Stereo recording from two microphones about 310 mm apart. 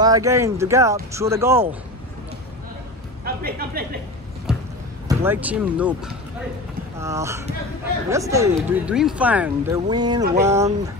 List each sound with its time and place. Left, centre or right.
0.0 s speech: centre
3.3 s speech: right
4.5 s music: centre
5.0 s speech: centre